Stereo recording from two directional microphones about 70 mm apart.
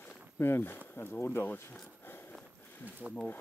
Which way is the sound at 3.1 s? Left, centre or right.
Centre.